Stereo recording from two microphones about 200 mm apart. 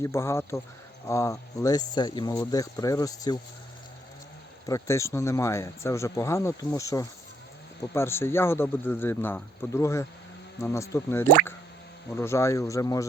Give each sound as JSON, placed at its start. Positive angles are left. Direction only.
{"t": 0.0, "sound": "speech", "side_deg": 15}
{"t": 4.6, "sound": "speech", "side_deg": 15}